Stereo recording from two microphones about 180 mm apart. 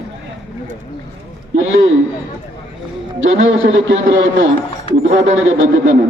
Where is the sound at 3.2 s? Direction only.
90° right.